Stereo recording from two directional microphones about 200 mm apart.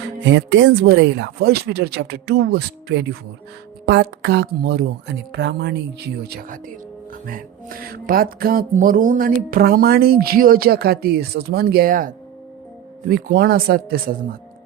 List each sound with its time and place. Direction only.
0.3 s speech: 70° right (ahead or behind); by 14.0 s 50° right (ahead or behind)